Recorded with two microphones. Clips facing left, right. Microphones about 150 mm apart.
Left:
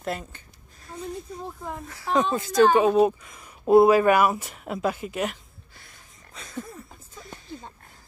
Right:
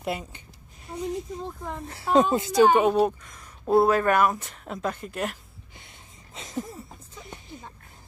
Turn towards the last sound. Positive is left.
turn(degrees=-20)  # may be behind; listen again after turning